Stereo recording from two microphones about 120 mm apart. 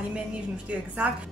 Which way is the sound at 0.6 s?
10° right (ahead or behind).